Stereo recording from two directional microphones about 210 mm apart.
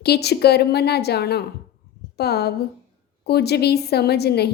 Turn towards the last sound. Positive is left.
turn(degrees=50)  # may be behind; listen again after turning